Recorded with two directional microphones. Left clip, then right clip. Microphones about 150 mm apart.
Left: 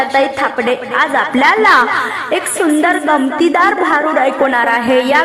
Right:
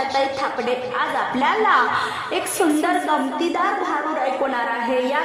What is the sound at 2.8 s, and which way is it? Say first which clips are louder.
A woman's voice: left 8 dB; 25° left (ahead or behind).